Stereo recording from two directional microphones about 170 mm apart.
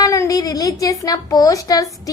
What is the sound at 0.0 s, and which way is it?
Speech, 20° left (ahead or behind).